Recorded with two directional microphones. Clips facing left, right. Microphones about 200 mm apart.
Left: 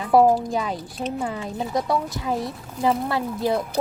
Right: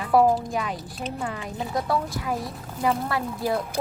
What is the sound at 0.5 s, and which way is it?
Speech, 30° left (ahead or behind).